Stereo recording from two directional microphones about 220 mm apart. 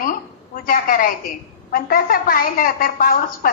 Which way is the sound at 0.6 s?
40° left (ahead or behind).